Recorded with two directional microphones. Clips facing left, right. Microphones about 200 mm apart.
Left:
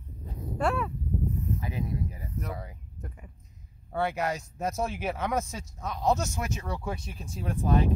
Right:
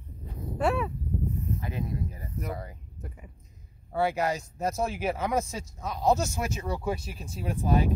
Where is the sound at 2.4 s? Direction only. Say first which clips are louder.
Right 3 dB; centre (ahead or behind).